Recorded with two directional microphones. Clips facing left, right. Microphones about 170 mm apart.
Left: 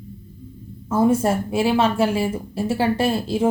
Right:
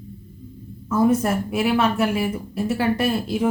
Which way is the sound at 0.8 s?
30° left (ahead or behind).